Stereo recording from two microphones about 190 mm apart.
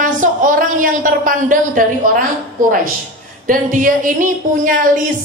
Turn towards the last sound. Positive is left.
turn(degrees=-45)  # may be behind; listen again after turning